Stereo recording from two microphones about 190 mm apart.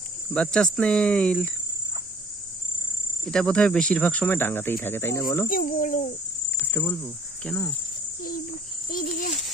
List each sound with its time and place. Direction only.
0.3 s speech: 5° left (ahead or behind)
3.2 s speech: 5° left (ahead or behind)
5.5 s speech: 45° left (ahead or behind)
6.6 s speech: 10° left (ahead or behind)
8.9 s babbling: 45° left (ahead or behind)